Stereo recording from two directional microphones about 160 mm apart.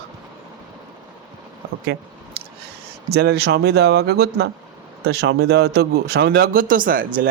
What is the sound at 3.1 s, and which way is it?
A man's voice, 90° right.